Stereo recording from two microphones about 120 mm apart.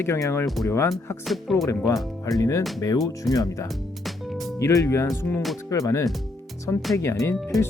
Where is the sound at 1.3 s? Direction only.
Centre (ahead or behind).